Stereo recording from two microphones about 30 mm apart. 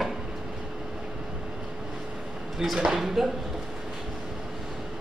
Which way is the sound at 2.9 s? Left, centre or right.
Centre.